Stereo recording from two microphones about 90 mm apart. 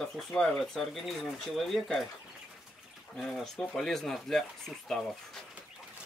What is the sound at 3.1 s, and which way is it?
Speech, 5° left (ahead or behind).